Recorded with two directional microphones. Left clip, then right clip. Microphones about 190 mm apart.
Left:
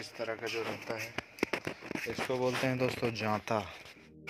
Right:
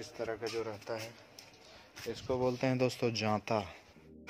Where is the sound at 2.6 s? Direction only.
20° right (ahead or behind).